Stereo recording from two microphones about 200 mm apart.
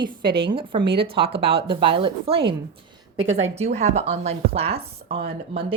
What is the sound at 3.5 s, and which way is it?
Speech, 35° right (ahead or behind).